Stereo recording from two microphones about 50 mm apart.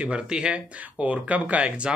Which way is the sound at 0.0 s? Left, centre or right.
Right.